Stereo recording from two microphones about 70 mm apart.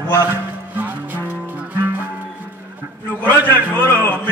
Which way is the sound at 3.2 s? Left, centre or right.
Left.